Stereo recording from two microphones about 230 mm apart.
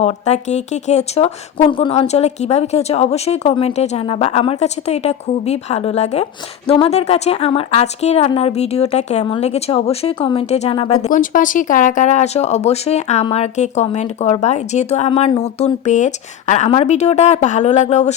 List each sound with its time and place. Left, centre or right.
0.0 s a woman's voice: left